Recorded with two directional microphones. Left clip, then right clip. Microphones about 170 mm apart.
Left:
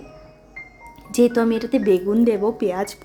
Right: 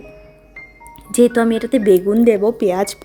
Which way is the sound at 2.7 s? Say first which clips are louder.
Right 6 dB; 40° right (ahead or behind).